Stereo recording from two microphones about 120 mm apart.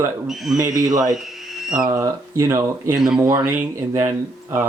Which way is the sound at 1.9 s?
25° right (ahead or behind).